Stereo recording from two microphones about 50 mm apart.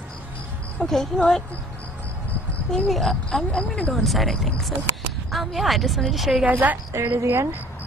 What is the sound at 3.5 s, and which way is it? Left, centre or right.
Speech, left.